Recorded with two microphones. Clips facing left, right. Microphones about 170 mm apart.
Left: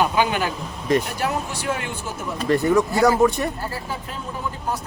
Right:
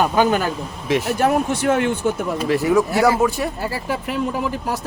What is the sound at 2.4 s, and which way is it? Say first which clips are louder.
Speech: left 1 dB; 5° right (ahead or behind).